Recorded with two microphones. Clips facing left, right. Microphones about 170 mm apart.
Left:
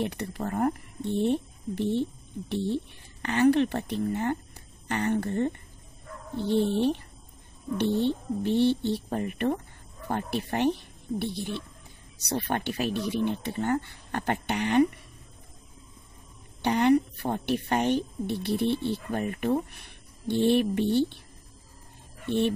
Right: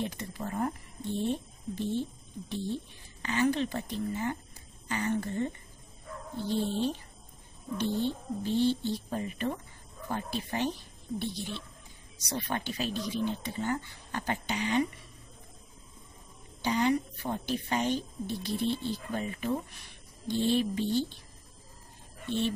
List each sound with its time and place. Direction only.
0.0 s a woman's voice: 65° left (ahead or behind)
16.6 s a woman's voice: 65° left (ahead or behind)
22.2 s speech: 60° left (ahead or behind)